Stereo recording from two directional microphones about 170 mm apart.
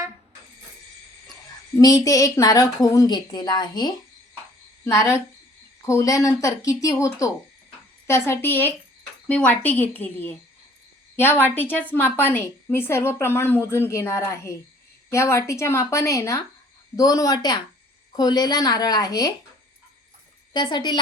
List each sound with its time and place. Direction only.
1.7 s a woman's voice: 20° left (ahead or behind)
20.5 s a woman's voice: 25° left (ahead or behind)